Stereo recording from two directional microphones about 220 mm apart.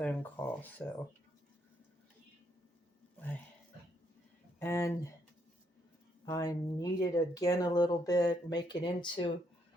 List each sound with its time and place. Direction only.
0.0 s speech: 5° left (ahead or behind)
4.6 s speech: 15° left (ahead or behind)
6.2 s speech: 15° left (ahead or behind)